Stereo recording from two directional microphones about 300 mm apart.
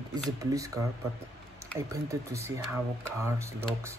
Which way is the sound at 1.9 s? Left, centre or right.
Centre.